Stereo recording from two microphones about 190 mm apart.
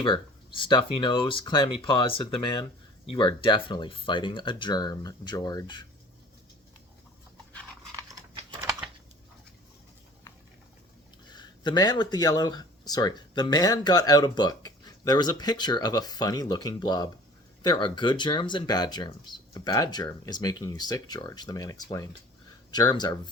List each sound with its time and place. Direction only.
0.0 s speech: 25° left (ahead or behind)
11.3 s speech: 25° left (ahead or behind)